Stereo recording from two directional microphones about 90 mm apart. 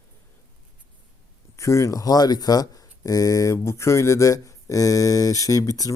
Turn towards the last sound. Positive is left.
turn(degrees=40)  # may be behind; listen again after turning